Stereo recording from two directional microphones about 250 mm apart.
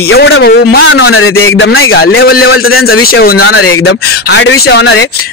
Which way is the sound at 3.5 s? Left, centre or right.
Left.